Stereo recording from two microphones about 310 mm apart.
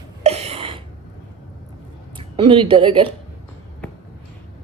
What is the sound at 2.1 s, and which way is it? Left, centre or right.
Speech, centre.